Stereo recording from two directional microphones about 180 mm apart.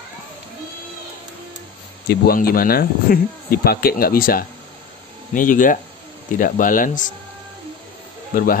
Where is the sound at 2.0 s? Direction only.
60° left (ahead or behind).